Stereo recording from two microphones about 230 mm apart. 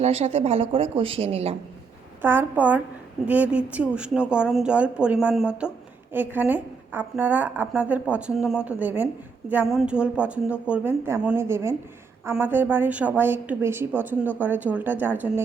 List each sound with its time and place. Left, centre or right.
0.0 s speech: right
2.2 s a woman's voice: centre